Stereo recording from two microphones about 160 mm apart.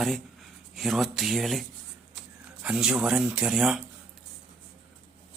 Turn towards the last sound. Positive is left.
turn(degrees=0)  # may be behind; listen again after turning